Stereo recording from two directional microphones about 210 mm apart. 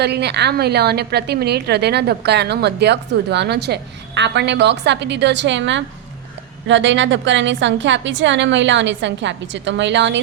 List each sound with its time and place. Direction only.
0.0 s a woman's voice: 50° right (ahead or behind)